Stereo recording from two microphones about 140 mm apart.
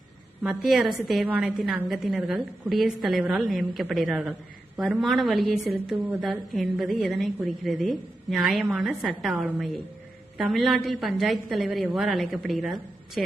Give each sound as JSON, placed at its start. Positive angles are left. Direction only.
{"t": 0.4, "sound": "a woman's voice", "side_deg": 0}